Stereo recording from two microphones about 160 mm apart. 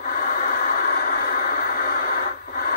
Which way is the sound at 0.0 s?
55° left (ahead or behind).